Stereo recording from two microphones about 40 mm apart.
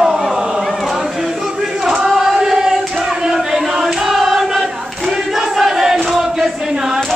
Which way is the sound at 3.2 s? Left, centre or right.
Centre.